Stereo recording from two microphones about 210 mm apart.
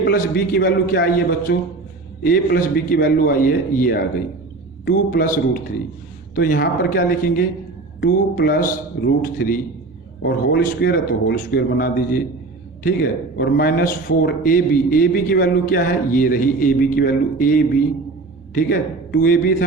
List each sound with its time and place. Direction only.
0.0 s a man's voice: 45° left (ahead or behind)